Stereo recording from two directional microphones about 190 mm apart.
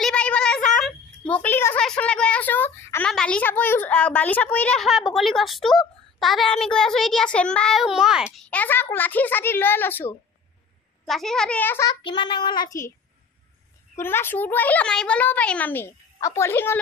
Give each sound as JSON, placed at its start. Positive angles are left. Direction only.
{"t": 0.0, "sound": "a sound", "side_deg": 5}
{"t": 0.7, "sound": "a woman's voice", "side_deg": 5}
{"t": 8.5, "sound": "a child's voice", "side_deg": 10}
{"t": 11.9, "sound": "child singing", "side_deg": 25}
{"t": 13.9, "sound": "a child's voice", "side_deg": 10}